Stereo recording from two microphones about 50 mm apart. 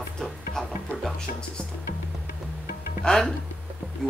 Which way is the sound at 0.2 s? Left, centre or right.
Centre.